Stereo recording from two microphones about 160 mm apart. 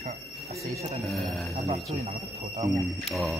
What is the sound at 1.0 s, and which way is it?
Speech, centre (ahead or behind).